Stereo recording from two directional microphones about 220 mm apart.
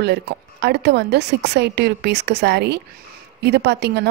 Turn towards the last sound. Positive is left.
turn(degrees=-50)  # may be behind; listen again after turning